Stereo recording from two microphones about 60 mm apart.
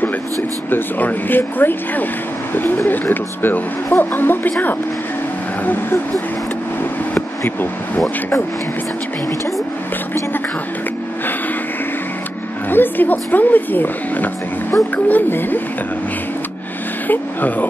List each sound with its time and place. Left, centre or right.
0.7 s speech: left
7.2 s speech: left
12.6 s speech: left
17.1 s speech: left